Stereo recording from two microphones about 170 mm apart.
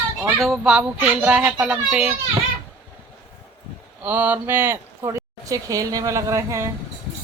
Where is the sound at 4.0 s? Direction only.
10° right (ahead or behind).